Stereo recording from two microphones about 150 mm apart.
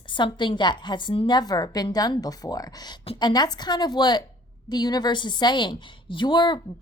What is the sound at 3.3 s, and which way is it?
A woman's voice, 25° left (ahead or behind).